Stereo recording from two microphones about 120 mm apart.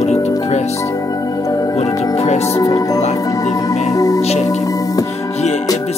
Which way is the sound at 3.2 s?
30° left (ahead or behind).